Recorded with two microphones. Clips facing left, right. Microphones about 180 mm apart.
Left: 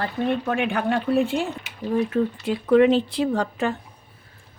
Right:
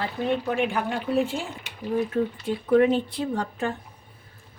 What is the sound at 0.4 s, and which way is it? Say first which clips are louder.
Speech: left 2 dB; 60° left (ahead or behind).